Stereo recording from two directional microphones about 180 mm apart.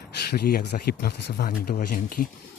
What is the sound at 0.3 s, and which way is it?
Speech, 60° left (ahead or behind).